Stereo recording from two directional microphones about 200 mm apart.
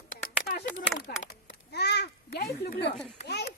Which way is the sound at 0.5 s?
50° left (ahead or behind).